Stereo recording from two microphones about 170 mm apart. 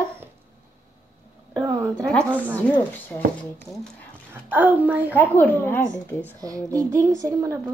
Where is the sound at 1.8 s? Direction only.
5° left (ahead or behind).